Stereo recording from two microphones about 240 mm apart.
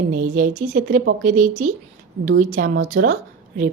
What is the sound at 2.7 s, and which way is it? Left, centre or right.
Speech, right.